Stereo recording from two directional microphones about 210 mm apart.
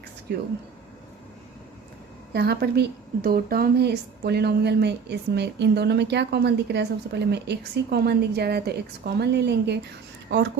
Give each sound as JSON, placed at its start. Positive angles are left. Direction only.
{"t": 0.3, "sound": "speech", "side_deg": -50}
{"t": 2.3, "sound": "speech", "side_deg": -50}